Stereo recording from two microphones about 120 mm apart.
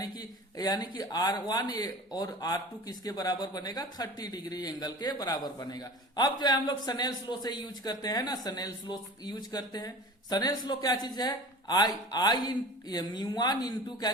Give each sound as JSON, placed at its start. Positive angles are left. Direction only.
{"t": 0.0, "sound": "speech", "side_deg": 35}